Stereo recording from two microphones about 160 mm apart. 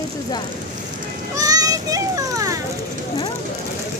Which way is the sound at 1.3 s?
20° right (ahead or behind).